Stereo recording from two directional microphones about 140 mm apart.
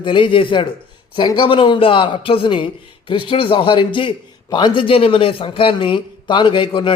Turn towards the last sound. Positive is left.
turn(degrees=35)  # may be behind; listen again after turning